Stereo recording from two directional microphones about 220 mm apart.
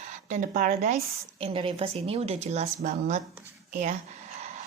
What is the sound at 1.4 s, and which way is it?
Speech, 25° right (ahead or behind).